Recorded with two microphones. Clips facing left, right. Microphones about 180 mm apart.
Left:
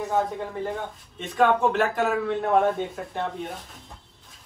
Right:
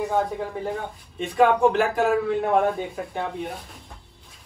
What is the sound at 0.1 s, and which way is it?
Speech, centre (ahead or behind).